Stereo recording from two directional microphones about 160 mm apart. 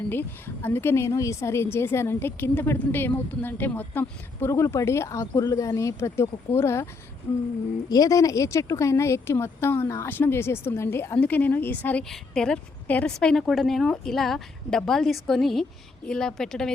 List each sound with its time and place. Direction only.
0.1 s speech: 15° left (ahead or behind)
7.9 s a woman's voice: 20° left (ahead or behind); by 16.7 s 5° left (ahead or behind)